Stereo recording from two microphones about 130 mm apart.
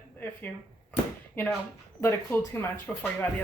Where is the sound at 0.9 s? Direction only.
10° left (ahead or behind).